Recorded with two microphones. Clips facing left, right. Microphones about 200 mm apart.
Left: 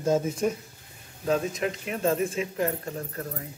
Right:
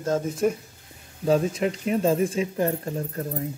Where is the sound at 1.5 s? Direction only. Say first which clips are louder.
Right 6 dB; 30° right (ahead or behind).